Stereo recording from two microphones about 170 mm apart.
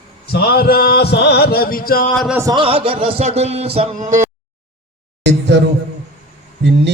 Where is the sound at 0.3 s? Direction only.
70° left (ahead or behind).